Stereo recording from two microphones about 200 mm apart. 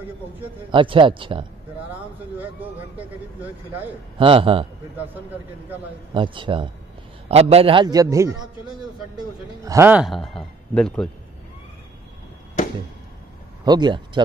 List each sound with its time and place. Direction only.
0.7 s a man's voice: 25° right (ahead or behind)
1.9 s speech: 10° right (ahead or behind)
4.2 s a man's voice: 25° right (ahead or behind)
6.1 s a man's voice: 25° right (ahead or behind)
9.7 s a man's voice: 10° right (ahead or behind); by 11.1 s 5° left (ahead or behind)
13.7 s a man's voice: 20° right (ahead or behind)